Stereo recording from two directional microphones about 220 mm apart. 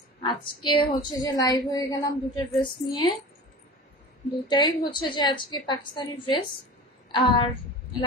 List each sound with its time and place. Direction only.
0.2 s a woman's voice: 20° left (ahead or behind)
4.5 s a woman's voice: 20° left (ahead or behind)